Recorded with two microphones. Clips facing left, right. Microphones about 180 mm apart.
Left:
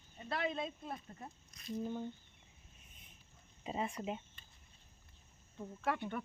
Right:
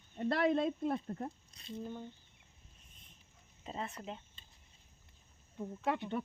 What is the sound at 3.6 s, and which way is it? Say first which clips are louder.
Speech: left 3 dB; 10° left (ahead or behind).